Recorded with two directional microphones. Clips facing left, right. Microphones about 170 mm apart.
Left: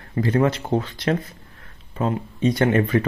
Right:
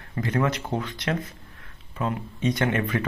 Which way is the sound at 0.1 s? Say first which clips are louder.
Left 5 dB; 30° left (ahead or behind).